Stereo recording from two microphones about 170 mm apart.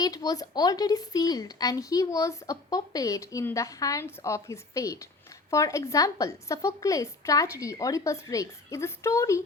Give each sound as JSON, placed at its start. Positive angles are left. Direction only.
{"t": 0.0, "sound": "speech", "side_deg": 20}